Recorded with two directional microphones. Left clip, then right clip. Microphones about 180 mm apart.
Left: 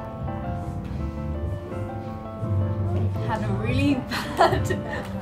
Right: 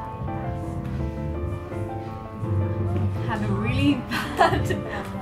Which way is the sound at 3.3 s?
50° left (ahead or behind).